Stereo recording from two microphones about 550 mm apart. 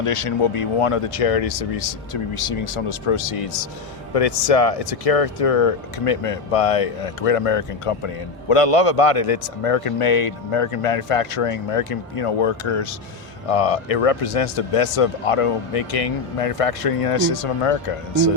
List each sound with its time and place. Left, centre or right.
0.0 s speech: left
4.1 s speech: left
13.5 s speech: left